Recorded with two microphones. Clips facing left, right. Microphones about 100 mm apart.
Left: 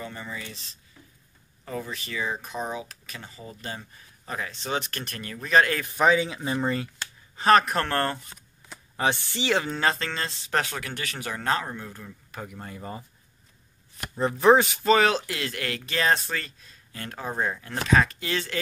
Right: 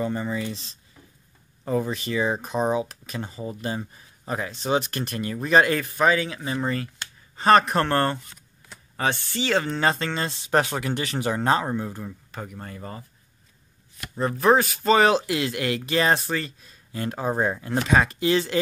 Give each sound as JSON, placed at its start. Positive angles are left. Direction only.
{"t": 0.0, "sound": "speech", "side_deg": -30}
{"t": 1.6, "sound": "speech", "side_deg": -30}
{"t": 4.5, "sound": "speech", "side_deg": -10}
{"t": 8.6, "sound": "computer keyboard", "side_deg": 10}
{"t": 9.3, "sound": "speech", "side_deg": 15}
{"t": 9.8, "sound": "speech", "side_deg": -5}
{"t": 10.6, "sound": "speech", "side_deg": -25}
{"t": 12.3, "sound": "speech", "side_deg": 5}
{"t": 14.5, "sound": "speech", "side_deg": 20}
{"t": 14.8, "sound": "speech", "side_deg": -5}